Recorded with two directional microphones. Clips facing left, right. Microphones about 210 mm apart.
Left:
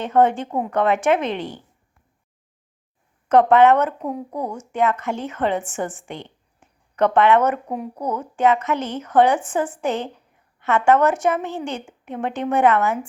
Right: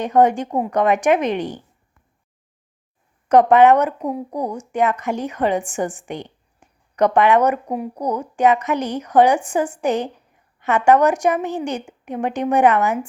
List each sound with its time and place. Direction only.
0.0 s speech: 15° right (ahead or behind)
3.2 s speech: 15° right (ahead or behind)